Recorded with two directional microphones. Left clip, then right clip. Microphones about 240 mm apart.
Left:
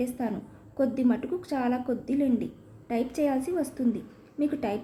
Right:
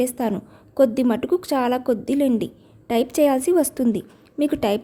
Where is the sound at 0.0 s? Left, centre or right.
Right.